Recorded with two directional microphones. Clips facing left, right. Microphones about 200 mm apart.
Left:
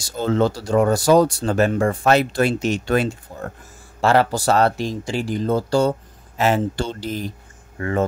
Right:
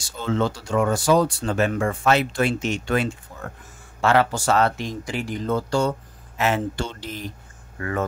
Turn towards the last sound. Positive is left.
turn(degrees=25)  # may be behind; listen again after turning